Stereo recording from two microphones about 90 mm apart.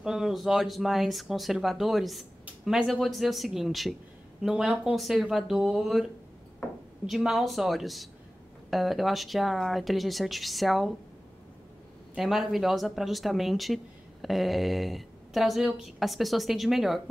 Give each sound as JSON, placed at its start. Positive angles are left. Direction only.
{"t": 0.0, "sound": "speech", "side_deg": -5}
{"t": 7.1, "sound": "speech", "side_deg": -5}
{"t": 12.2, "sound": "speech", "side_deg": 0}